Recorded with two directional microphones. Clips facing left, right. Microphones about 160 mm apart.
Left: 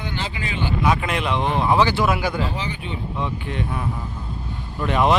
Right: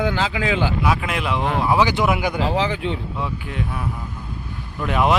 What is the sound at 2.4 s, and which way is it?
Speech, 90° right.